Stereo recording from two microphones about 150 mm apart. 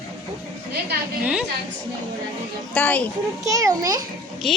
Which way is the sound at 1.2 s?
5° right (ahead or behind).